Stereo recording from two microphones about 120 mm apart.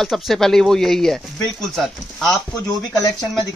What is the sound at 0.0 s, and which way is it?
Speech, centre (ahead or behind).